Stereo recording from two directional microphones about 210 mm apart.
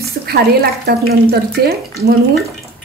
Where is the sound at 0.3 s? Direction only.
50° right (ahead or behind).